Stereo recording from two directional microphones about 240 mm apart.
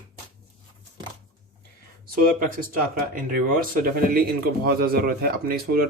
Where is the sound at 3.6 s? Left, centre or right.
Right.